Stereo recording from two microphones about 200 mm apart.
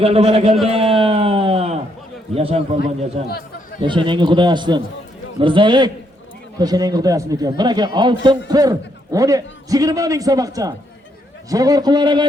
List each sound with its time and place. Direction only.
0.0 s a man's voice: 30° right (ahead or behind)
0.6 s a sound: 30° right (ahead or behind)
2.3 s a man's voice: 30° right (ahead or behind)